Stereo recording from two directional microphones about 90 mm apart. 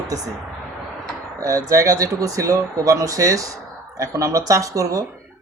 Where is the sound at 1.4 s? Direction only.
35° right (ahead or behind).